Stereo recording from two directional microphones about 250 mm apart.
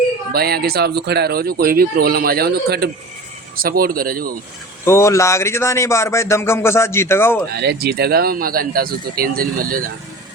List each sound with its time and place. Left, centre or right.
0.3 s speech: right
4.9 s speech: centre
7.5 s speech: right